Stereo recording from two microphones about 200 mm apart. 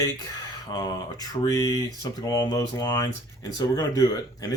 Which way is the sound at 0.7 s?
15° left (ahead or behind).